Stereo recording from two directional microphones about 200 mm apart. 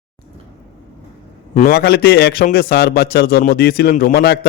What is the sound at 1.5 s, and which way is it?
A man's voice, 50° left (ahead or behind).